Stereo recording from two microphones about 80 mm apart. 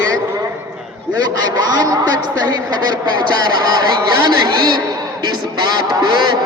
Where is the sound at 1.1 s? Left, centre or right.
Right.